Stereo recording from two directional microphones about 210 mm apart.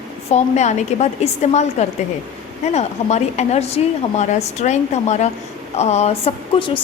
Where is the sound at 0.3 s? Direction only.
30° left (ahead or behind).